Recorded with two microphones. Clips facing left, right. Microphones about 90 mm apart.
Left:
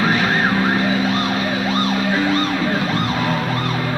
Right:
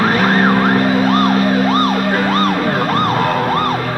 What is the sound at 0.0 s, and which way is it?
Emergency vehicle, 45° right (ahead or behind).